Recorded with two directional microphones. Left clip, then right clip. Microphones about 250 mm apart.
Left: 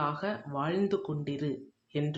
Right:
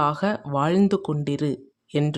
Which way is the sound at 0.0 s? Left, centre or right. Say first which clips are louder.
Right 9 dB; right.